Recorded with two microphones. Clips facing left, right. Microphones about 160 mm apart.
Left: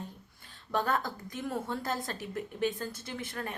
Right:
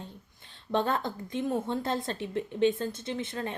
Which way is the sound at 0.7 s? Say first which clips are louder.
Right 3 dB; 25° right (ahead or behind).